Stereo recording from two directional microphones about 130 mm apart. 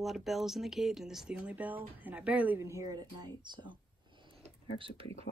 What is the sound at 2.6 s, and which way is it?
Speech, 25° right (ahead or behind).